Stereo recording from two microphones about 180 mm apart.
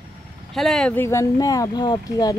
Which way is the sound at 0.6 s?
Centre (ahead or behind).